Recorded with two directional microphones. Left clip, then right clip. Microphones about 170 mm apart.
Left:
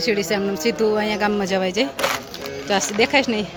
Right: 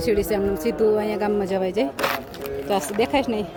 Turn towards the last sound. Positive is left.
turn(degrees=0)  # may be behind; listen again after turning